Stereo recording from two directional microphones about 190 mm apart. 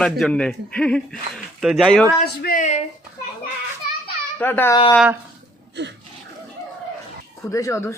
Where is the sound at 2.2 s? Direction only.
55° left (ahead or behind).